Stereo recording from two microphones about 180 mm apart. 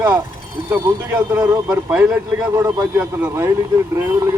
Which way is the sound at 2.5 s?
15° right (ahead or behind).